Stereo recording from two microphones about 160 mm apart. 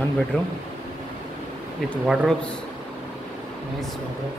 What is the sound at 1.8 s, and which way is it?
Speech, centre (ahead or behind).